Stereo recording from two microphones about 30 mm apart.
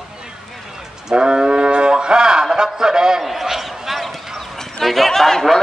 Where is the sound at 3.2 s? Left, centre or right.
Centre.